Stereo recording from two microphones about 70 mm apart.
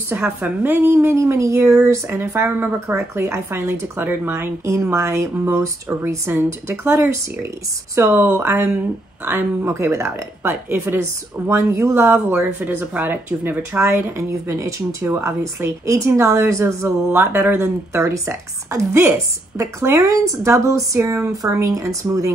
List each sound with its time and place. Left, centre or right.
0.4 s speech: right
9.7 s speech: right
12.5 s speech: right
17.1 s speech: right
17.9 s speech: right